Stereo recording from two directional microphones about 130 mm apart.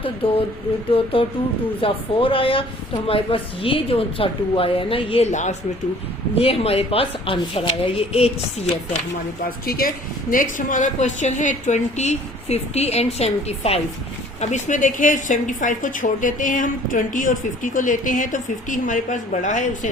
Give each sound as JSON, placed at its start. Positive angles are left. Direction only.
{"t": 0.2, "sound": "speech", "side_deg": 45}
{"t": 1.8, "sound": "speech", "side_deg": 45}
{"t": 5.3, "sound": "speech", "side_deg": 65}
{"t": 6.3, "sound": "speech", "side_deg": 50}
{"t": 9.8, "sound": "a woman's voice", "side_deg": 90}
{"t": 14.4, "sound": "a woman's voice", "side_deg": 70}